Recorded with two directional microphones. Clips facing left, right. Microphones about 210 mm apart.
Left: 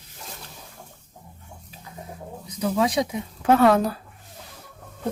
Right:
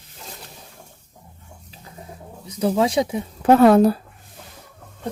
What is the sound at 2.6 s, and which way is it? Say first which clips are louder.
Speech: right 3 dB; 30° right (ahead or behind).